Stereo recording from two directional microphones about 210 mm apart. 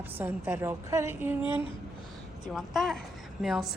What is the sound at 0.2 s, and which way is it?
A woman's voice, 10° right (ahead or behind).